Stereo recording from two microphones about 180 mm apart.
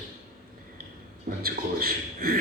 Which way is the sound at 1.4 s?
55° right (ahead or behind).